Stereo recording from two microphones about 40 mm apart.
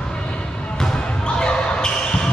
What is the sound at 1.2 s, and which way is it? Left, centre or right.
Basketball bounce, left.